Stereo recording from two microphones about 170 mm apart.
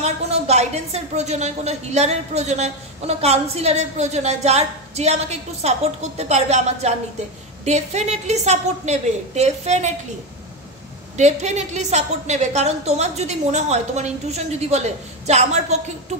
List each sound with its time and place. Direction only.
0.0 s a woman's voice: 40° right (ahead or behind)
11.1 s a woman's voice: 45° right (ahead or behind)